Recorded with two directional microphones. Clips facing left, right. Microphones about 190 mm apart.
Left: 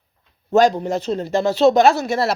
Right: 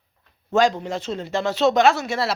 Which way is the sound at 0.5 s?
40° left (ahead or behind).